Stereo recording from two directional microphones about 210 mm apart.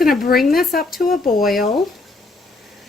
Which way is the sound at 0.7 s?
45° left (ahead or behind).